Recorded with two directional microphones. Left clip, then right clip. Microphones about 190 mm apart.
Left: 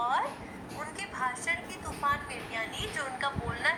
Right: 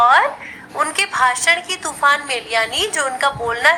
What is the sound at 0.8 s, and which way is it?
A woman's voice, 40° right (ahead or behind).